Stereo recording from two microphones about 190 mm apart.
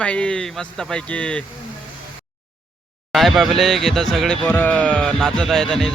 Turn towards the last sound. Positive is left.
turn(degrees=0)  # may be behind; listen again after turning